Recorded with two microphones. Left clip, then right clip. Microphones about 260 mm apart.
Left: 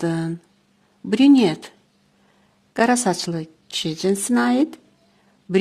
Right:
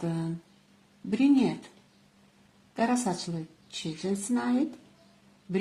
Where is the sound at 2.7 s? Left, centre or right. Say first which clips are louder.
Left 10 dB; left.